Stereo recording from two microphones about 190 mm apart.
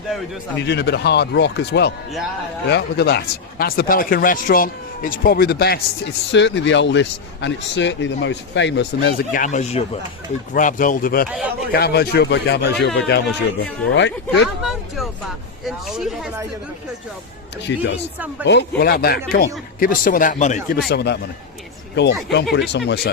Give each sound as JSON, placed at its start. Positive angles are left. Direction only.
{"t": 0.6, "sound": "speech", "side_deg": 65}
{"t": 6.3, "sound": "a man's voice", "side_deg": 70}
{"t": 9.3, "sound": "speech", "side_deg": 40}
{"t": 13.9, "sound": "a man's voice", "side_deg": 70}
{"t": 14.6, "sound": "a sound", "side_deg": 0}
{"t": 15.6, "sound": "speech", "side_deg": 0}
{"t": 17.7, "sound": "a man's voice", "side_deg": 70}
{"t": 20.9, "sound": "speech", "side_deg": 60}